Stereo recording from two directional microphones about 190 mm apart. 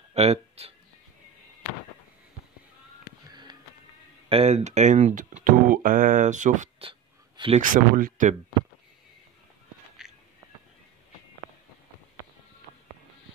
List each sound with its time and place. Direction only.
0.1 s speech: 35° right (ahead or behind)
3.3 s music: 25° right (ahead or behind)
4.3 s speech: 35° right (ahead or behind)
6.8 s a sound: 30° right (ahead or behind)
7.6 s speech: 45° right (ahead or behind)
10.0 s music: centre (ahead or behind)